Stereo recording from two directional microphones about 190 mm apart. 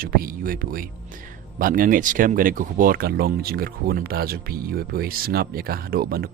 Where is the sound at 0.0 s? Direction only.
50° right (ahead or behind).